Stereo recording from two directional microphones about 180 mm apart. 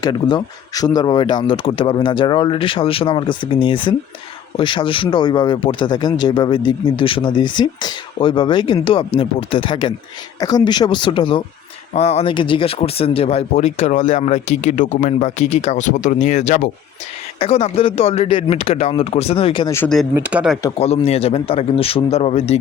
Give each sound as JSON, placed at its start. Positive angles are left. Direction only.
{"t": 0.0, "sound": "a man's voice", "side_deg": 25}
{"t": 17.4, "sound": "speech", "side_deg": 35}
{"t": 19.7, "sound": "speech", "side_deg": 10}
{"t": 20.1, "sound": "speech", "side_deg": -5}
{"t": 20.7, "sound": "speech", "side_deg": 35}